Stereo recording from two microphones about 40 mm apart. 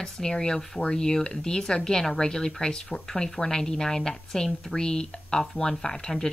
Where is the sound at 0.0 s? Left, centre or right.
Centre.